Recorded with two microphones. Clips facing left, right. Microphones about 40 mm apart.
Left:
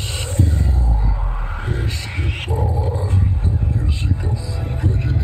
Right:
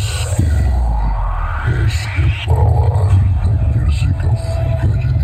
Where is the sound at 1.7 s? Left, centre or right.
Right.